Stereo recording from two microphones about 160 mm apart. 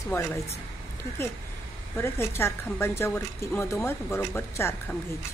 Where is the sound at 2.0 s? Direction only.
15° left (ahead or behind).